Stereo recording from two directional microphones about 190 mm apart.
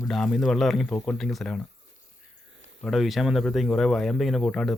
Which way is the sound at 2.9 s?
Centre (ahead or behind).